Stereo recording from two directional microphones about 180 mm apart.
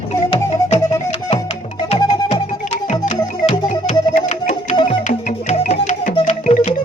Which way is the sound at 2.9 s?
40° left (ahead or behind).